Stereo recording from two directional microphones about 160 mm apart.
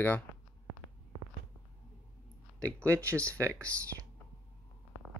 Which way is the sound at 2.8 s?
20° right (ahead or behind).